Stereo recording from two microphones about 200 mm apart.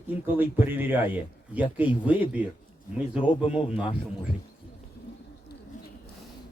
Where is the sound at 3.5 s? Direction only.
30° left (ahead or behind).